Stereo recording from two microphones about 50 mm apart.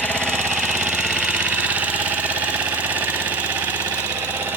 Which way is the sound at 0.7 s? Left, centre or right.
Right.